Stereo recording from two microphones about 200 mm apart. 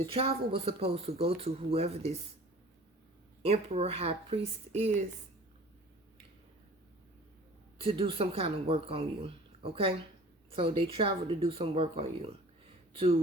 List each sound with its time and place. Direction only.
0.1 s a woman's voice: 30° right (ahead or behind)
3.4 s speech: 30° right (ahead or behind)
7.8 s a woman's voice: 25° right (ahead or behind)